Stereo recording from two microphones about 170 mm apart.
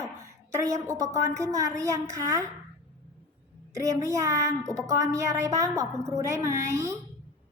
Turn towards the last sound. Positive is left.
turn(degrees=-15)  # may be behind; listen again after turning